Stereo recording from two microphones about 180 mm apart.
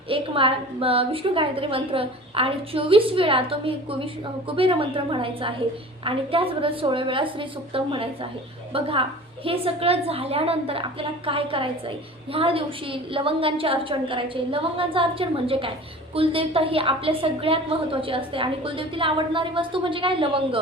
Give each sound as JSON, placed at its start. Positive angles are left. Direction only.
{"t": 0.1, "sound": "a woman's voice", "side_deg": -30}